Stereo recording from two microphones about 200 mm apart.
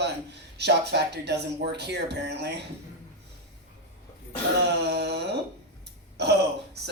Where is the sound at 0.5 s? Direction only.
55° right (ahead or behind).